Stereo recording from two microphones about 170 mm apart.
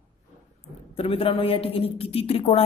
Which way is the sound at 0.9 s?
35° left (ahead or behind).